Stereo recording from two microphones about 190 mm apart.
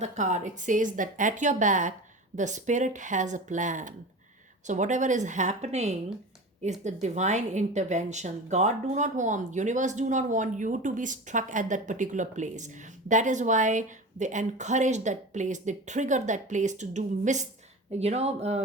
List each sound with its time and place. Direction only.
0.0 s a woman's voice: 40° right (ahead or behind)